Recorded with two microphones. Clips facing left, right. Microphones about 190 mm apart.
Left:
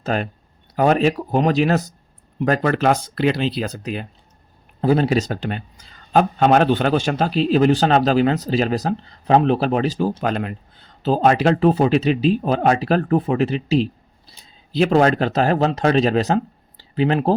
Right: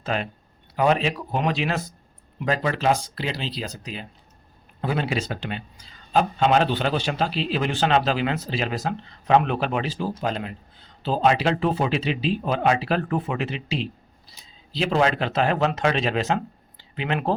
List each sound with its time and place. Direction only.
0.0 s a man's voice: 45° left (ahead or behind)
4.8 s a man's voice: 40° left (ahead or behind)
10.2 s speech: 55° left (ahead or behind)
11.0 s speech: 45° left (ahead or behind)